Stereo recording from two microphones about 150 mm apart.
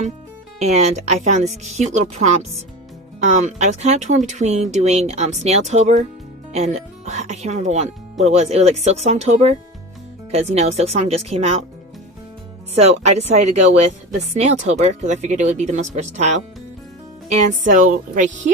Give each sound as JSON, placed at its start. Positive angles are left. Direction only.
{"t": 0.6, "sound": "speech", "side_deg": -45}
{"t": 12.7, "sound": "speech", "side_deg": -45}